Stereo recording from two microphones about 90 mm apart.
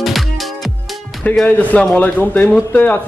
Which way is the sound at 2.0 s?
20° left (ahead or behind).